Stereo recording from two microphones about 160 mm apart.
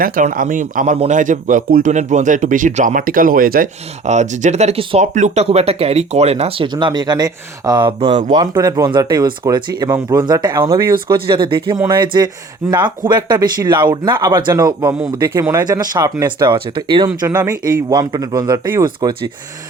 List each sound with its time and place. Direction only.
0.0 s speech: 60° right (ahead or behind)
4.0 s speech: 45° right (ahead or behind)
5.1 s speech: 45° right (ahead or behind); by 8.2 s 30° right (ahead or behind)
8.5 s speech: 20° right (ahead or behind)
11.1 s speech: 30° right (ahead or behind)
17.2 s speech: 15° right (ahead or behind)